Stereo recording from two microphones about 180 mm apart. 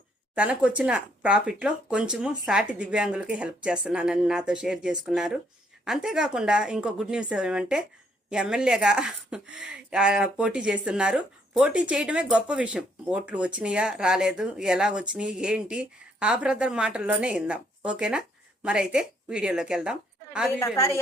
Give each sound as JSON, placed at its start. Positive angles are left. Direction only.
{"t": 0.3, "sound": "a woman's voice", "side_deg": -5}
{"t": 20.6, "sound": "a woman's voice", "side_deg": 15}